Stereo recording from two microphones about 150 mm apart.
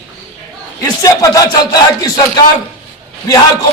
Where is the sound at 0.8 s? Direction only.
25° left (ahead or behind).